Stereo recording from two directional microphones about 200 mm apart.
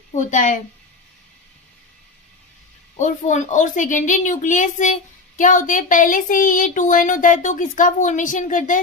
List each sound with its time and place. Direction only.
0.1 s speech: 40° left (ahead or behind)
3.0 s speech: 40° left (ahead or behind)